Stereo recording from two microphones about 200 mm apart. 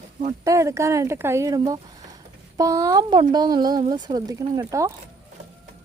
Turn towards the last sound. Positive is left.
turn(degrees=-15)  # may be behind; listen again after turning